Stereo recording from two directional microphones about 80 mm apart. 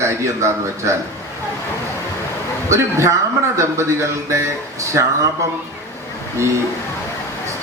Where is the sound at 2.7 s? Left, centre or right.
Right.